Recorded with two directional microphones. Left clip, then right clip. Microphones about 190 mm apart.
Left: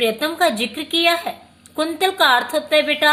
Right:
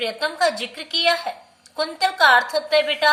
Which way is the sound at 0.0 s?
50° left (ahead or behind).